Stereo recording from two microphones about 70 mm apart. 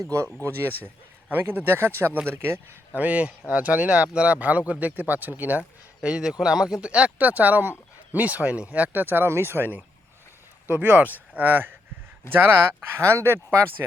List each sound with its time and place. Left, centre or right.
0.0 s speech: right
0.4 s speech: right
1.3 s speech: right
2.9 s speech: centre
6.1 s speech: centre; by 13.4 s right